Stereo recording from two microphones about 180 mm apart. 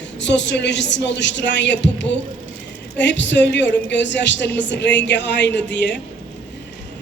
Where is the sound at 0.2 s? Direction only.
80° left.